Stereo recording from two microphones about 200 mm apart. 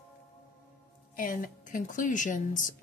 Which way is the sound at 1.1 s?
45° left (ahead or behind).